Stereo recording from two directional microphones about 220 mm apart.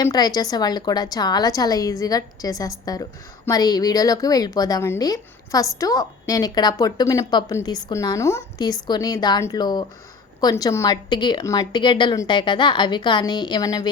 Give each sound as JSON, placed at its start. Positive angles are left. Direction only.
{"t": 0.0, "sound": "a woman's voice", "side_deg": 15}